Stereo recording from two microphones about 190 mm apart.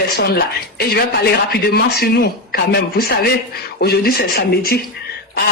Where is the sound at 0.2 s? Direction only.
55° left (ahead or behind).